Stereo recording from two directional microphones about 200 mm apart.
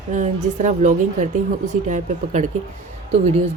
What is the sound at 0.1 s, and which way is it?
Speech, 40° right (ahead or behind).